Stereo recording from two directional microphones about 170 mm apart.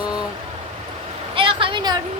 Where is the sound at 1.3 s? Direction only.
30° right (ahead or behind).